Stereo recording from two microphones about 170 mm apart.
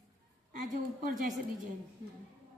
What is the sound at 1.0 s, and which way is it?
Speech, 50° right (ahead or behind).